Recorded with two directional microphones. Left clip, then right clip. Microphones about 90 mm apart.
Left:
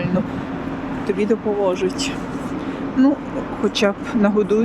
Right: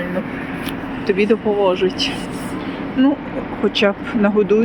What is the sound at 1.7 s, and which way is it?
Speech, 15° left (ahead or behind).